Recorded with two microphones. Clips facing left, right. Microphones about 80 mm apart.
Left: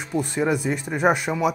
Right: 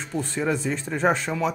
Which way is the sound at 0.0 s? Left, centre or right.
Centre.